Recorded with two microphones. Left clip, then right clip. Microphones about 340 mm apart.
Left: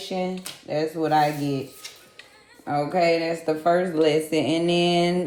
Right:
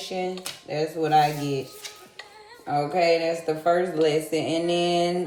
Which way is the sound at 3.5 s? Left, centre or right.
Left.